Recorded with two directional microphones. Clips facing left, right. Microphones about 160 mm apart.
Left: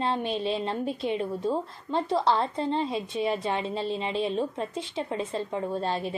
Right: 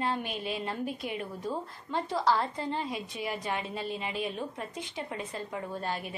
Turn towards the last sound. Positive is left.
turn(degrees=25)  # may be behind; listen again after turning